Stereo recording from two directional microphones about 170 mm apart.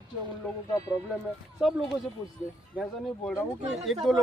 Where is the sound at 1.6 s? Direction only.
5° right (ahead or behind).